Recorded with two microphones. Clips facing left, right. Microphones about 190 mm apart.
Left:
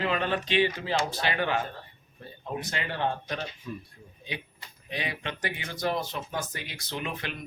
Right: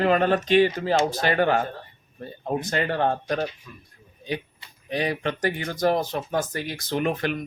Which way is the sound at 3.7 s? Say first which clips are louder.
Left 8 dB; 30° left (ahead or behind).